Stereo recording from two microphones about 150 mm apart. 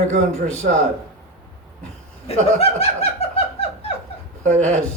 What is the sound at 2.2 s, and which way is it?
Snicker, 45° left (ahead or behind).